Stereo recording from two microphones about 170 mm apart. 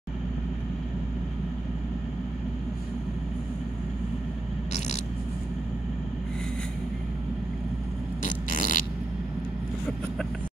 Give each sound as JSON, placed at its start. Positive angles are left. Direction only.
{"t": 8.2, "sound": "fart", "side_deg": 50}